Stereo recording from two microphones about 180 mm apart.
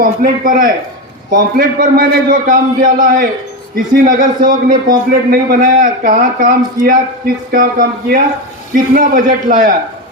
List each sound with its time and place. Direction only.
0.0 s a man's voice: 50° right (ahead or behind)